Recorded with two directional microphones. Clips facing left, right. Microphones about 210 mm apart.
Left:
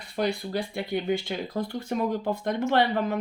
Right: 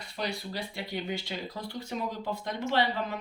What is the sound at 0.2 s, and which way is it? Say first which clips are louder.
Speech: left 8 dB; 50° left (ahead or behind).